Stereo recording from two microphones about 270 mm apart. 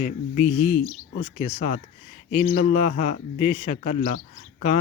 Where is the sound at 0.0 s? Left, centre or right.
Left.